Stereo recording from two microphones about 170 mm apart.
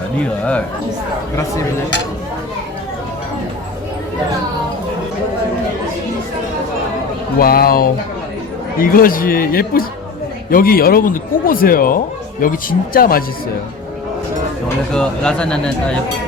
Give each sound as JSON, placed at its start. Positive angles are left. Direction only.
{"t": 7.3, "sound": "speech", "side_deg": 60}
{"t": 14.9, "sound": "speech", "side_deg": 5}